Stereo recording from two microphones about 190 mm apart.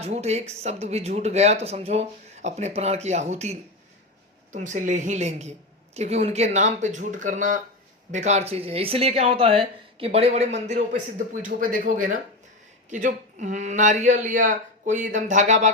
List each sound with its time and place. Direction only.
0.0 s speech: 35° right (ahead or behind)